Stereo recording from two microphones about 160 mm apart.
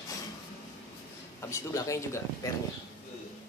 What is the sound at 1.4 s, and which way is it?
Speech, 20° left (ahead or behind).